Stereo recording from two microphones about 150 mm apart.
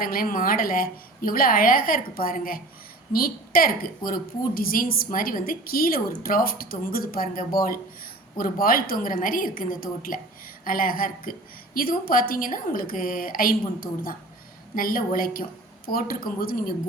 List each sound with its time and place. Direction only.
0.0 s a woman's voice: 75° left (ahead or behind)